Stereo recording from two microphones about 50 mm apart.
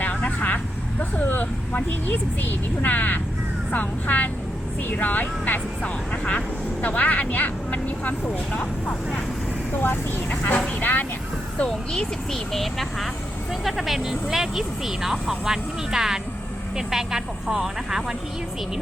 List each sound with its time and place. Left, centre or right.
0.0 s vehicle: left
3.7 s speech: left
5.8 s speech: left
9.7 s speech: left
11.7 s speech: centre